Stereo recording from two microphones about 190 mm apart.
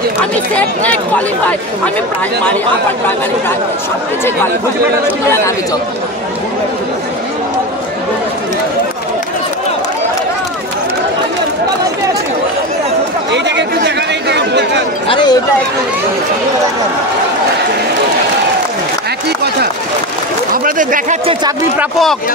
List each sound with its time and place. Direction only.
0.2 s speech: 10° left (ahead or behind)
13.7 s chatter: 65° right (ahead or behind)
15.0 s speech: 25° left (ahead or behind)
20.6 s speech: 45° right (ahead or behind)